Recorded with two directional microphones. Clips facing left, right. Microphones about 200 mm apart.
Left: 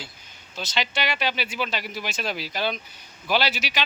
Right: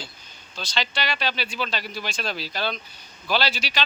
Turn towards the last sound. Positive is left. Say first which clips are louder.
# left 1 dB
turn(degrees=20)  # may be behind; listen again after turning